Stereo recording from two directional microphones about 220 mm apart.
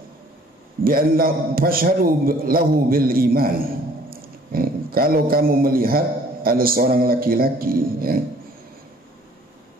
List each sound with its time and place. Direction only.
0.8 s a man's voice: 40° right (ahead or behind)